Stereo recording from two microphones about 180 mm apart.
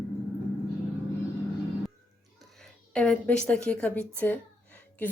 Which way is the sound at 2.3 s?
5° left (ahead or behind).